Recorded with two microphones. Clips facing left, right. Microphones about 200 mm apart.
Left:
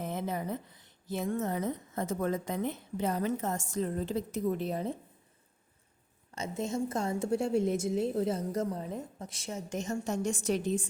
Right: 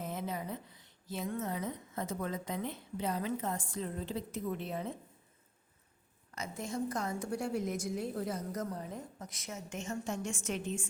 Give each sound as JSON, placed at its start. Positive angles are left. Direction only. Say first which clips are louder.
{"t": 0.0, "sound": "a woman's voice", "louder": "left 4 dB", "side_deg": 50}
{"t": 6.3, "sound": "a woman's voice", "louder": "left 5 dB", "side_deg": 25}